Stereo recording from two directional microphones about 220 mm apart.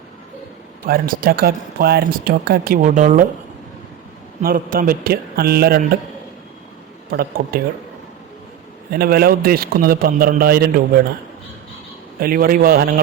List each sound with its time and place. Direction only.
0.9 s speech: 40° right (ahead or behind)
4.4 s speech: 40° right (ahead or behind)
7.1 s speech: 40° right (ahead or behind)
8.9 s speech: 45° right (ahead or behind)
12.2 s a man's voice: 40° right (ahead or behind)